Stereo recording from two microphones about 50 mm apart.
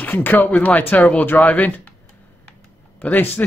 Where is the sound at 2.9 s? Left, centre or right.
Left.